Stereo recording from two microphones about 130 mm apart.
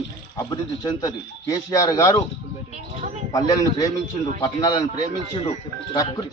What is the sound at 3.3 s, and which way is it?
Speech, 30° left (ahead or behind).